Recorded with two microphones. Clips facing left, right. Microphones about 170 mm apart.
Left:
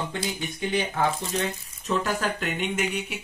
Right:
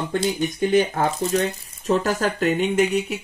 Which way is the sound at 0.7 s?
45° right (ahead or behind).